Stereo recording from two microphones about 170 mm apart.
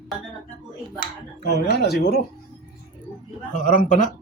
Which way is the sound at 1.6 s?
70° left (ahead or behind).